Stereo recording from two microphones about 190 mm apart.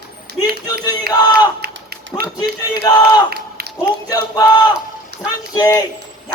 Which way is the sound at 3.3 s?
55° right (ahead or behind).